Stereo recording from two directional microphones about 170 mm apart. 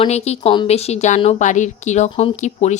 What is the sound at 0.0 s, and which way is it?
Speech, 35° left (ahead or behind).